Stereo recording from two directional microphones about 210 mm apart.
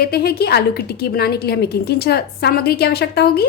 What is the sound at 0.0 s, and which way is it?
A woman's voice, 50° left (ahead or behind).